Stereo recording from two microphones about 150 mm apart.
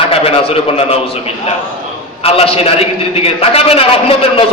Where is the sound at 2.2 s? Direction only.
40° left (ahead or behind).